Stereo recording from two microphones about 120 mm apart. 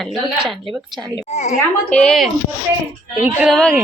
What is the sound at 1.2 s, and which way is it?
Speech, 75° left (ahead or behind).